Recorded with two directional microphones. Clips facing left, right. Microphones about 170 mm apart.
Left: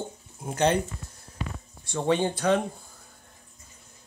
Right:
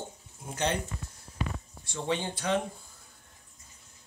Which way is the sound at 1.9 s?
50° left (ahead or behind).